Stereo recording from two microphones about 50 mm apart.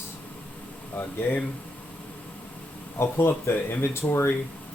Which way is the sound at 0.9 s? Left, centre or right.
Left.